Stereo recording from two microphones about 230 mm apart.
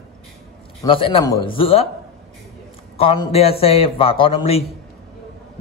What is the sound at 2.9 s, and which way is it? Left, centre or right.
Speech, left.